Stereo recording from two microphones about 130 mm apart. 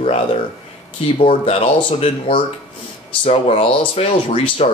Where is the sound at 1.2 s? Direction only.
45° left (ahead or behind).